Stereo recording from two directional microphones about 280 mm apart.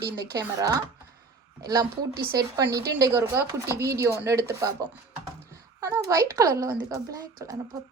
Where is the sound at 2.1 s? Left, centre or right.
Right.